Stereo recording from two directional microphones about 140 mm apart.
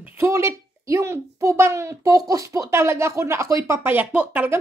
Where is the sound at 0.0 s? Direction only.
20° right (ahead or behind).